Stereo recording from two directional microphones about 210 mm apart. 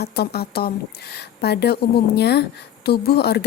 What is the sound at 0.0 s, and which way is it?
A woman's voice, 50° left (ahead or behind).